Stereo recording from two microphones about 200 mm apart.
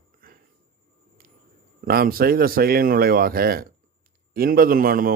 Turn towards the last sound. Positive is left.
turn(degrees=-45)  # may be behind; listen again after turning